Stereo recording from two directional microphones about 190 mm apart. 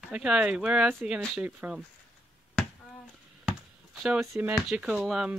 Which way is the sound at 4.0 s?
5° right (ahead or behind).